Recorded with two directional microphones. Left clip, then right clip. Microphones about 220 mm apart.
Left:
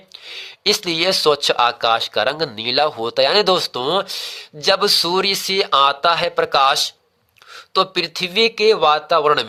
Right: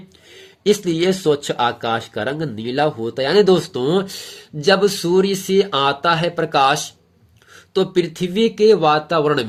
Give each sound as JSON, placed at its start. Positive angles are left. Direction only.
{"t": 0.3, "sound": "speech", "side_deg": 40}